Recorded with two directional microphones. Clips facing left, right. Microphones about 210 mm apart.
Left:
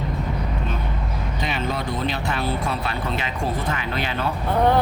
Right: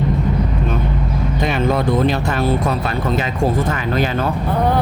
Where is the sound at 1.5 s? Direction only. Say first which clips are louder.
Right 9 dB; 50° right (ahead or behind).